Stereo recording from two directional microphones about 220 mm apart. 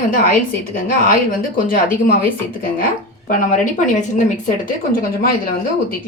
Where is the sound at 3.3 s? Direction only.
35° left (ahead or behind).